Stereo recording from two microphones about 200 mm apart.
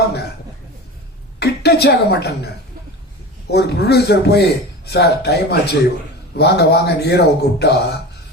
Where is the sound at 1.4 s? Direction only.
55° left (ahead or behind).